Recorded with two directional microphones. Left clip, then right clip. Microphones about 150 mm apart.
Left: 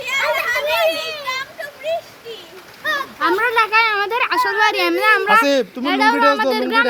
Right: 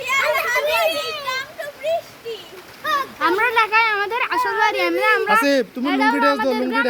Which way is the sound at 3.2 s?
20° left (ahead or behind).